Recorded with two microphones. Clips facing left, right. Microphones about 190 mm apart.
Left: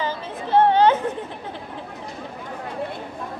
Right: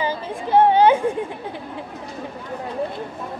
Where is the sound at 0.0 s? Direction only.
10° right (ahead or behind).